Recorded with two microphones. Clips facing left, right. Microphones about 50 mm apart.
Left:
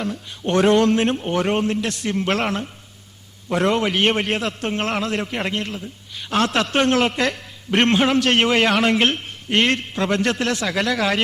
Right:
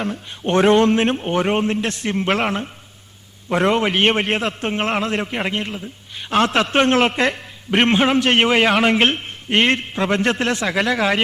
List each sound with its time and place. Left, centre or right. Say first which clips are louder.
0.0 s a man's voice: right 2 dB; right